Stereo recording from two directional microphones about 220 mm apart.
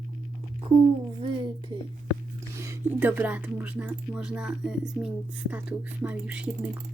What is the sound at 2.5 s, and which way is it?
Speech, 10° right (ahead or behind).